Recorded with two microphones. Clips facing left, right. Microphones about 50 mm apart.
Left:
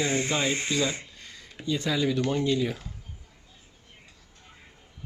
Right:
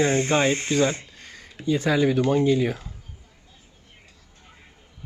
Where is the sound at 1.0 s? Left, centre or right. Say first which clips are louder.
Right 3 dB; right.